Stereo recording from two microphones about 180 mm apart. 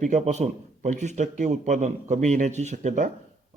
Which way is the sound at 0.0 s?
40° right (ahead or behind).